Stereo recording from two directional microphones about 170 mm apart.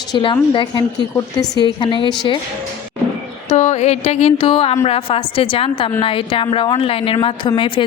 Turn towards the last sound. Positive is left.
turn(degrees=30)  # may be behind; listen again after turning